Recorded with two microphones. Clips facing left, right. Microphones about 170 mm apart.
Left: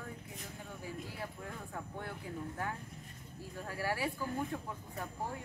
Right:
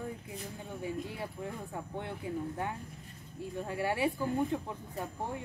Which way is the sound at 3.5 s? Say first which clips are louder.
Right 4 dB; 25° right (ahead or behind).